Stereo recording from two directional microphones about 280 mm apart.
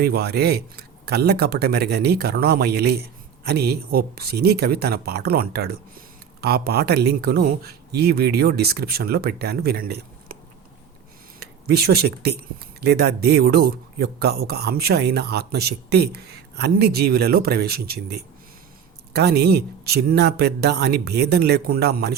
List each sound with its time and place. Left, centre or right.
0.0 s speech: right
11.7 s speech: right